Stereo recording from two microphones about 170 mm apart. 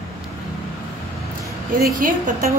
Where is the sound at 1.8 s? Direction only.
55° right (ahead or behind).